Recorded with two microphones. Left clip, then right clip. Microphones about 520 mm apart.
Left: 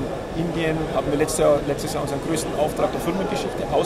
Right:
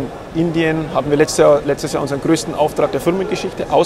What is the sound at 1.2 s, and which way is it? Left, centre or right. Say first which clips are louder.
Speech: right 8 dB; right.